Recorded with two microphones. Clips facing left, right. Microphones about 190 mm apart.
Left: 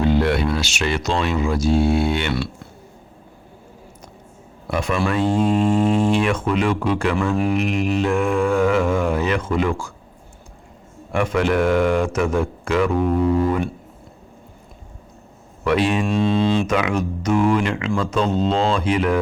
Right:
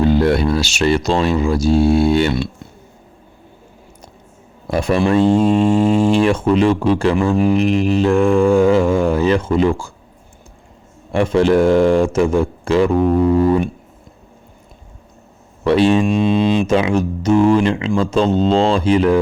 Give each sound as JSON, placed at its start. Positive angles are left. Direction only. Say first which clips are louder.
{"t": 0.0, "sound": "speech", "louder": "right 4 dB", "side_deg": -40}
{"t": 4.7, "sound": "speech", "louder": "right 6 dB", "side_deg": -30}
{"t": 11.1, "sound": "speech", "louder": "right 6 dB", "side_deg": -30}
{"t": 15.6, "sound": "speech", "louder": "right 6 dB", "side_deg": -30}
{"t": 16.0, "sound": "mantra", "louder": "right 3 dB", "side_deg": -15}
{"t": 16.6, "sound": "speech", "louder": "right 5 dB", "side_deg": -25}